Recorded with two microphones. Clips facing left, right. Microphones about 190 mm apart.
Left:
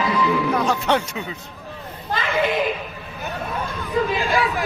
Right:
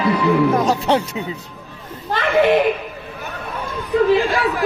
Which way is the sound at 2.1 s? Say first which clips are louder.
Right 7 dB; 70° right (ahead or behind).